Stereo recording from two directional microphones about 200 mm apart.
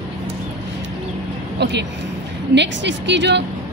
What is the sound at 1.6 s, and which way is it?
A woman's voice, 60° right (ahead or behind).